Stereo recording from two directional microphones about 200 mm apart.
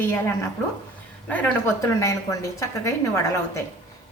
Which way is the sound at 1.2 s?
10° left (ahead or behind).